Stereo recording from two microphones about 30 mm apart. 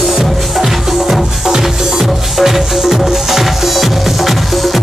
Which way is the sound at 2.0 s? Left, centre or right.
Centre.